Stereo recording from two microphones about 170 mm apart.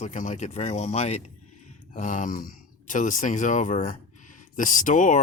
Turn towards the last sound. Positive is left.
turn(degrees=50)  # may be behind; listen again after turning